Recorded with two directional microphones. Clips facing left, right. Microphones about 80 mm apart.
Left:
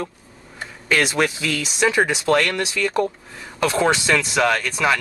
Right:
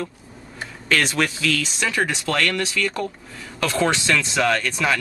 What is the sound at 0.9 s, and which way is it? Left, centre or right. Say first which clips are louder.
A man's voice: left 2 dB; centre.